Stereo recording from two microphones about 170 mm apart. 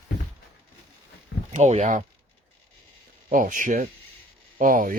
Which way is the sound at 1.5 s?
40° right (ahead or behind).